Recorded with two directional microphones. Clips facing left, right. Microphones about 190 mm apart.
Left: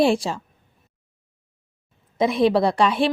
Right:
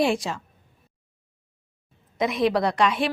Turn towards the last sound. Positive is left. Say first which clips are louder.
# left 3 dB
turn(degrees=30)  # may be behind; listen again after turning